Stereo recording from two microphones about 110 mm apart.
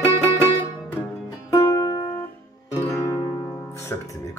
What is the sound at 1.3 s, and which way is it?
Music, 30° left (ahead or behind).